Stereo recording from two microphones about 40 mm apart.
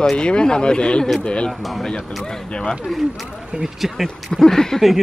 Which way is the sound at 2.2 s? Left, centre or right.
Left.